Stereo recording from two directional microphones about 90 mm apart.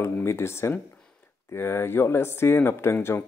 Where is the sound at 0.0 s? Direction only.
30° left (ahead or behind).